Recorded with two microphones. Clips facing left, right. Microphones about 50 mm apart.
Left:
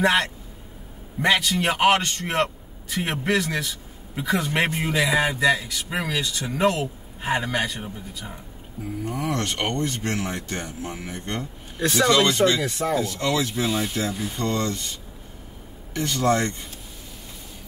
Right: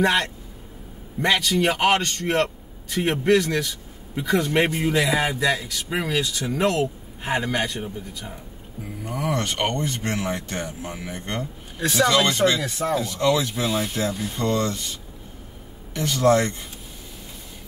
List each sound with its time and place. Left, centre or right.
0.0 s a man's voice: centre
12.3 s speech: right
12.6 s speech: centre
13.0 s speech: right
13.7 s a man's voice: centre
14.4 s speech: centre